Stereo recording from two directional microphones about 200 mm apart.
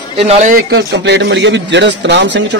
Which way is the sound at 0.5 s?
55° right (ahead or behind).